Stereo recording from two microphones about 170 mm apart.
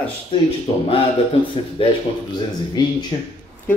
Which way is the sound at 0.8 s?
35° left (ahead or behind).